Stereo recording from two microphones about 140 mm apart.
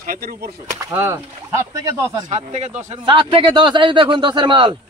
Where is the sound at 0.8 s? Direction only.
20° right (ahead or behind).